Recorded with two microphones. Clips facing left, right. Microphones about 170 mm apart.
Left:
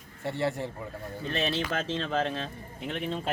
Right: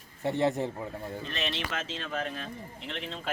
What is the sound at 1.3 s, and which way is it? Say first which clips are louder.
Speech: left 7 dB; 30° left (ahead or behind).